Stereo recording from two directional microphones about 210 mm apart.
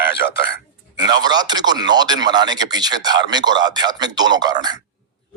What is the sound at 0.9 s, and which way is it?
A man's voice, 20° right (ahead or behind).